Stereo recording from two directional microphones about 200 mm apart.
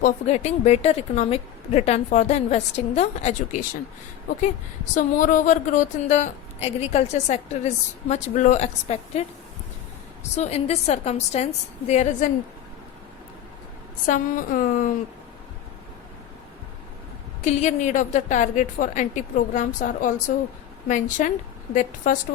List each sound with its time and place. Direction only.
0.0 s a woman's voice: 35° left (ahead or behind)
4.9 s a woman's voice: 40° left (ahead or behind)
10.3 s a woman's voice: 35° left (ahead or behind)
14.1 s a woman's voice: 40° left (ahead or behind)
17.4 s a woman's voice: 35° left (ahead or behind)